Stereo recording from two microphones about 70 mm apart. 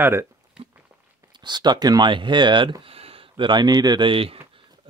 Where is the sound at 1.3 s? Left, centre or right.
Right.